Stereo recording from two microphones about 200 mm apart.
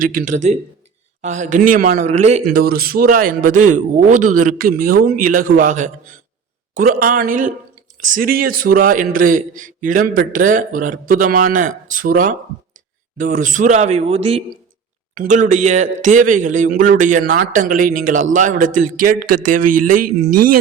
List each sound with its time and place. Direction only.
0.0 s a man's voice: 45° right (ahead or behind)
15.1 s speech: 40° right (ahead or behind)